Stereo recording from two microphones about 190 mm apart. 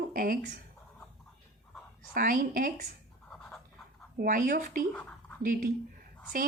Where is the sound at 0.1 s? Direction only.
50° right (ahead or behind).